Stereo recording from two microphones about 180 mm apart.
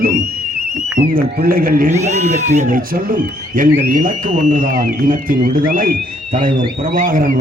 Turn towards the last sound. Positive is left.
turn(degrees=-50)  # may be behind; listen again after turning